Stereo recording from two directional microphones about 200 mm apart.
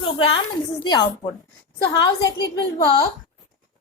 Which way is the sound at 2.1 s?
20° left (ahead or behind).